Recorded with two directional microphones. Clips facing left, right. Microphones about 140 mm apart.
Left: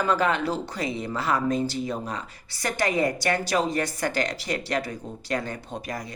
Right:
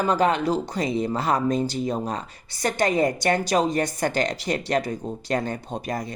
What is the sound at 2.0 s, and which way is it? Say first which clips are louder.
Speech: right 4 dB; 45° right (ahead or behind).